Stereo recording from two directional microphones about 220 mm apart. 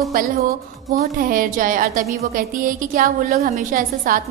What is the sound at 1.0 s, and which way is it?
A woman's voice, 40° right (ahead or behind).